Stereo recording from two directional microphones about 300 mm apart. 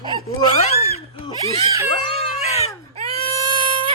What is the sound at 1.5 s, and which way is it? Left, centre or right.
Cat, centre.